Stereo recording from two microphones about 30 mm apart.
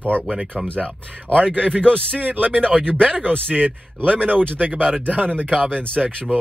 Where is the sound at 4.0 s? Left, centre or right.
Left.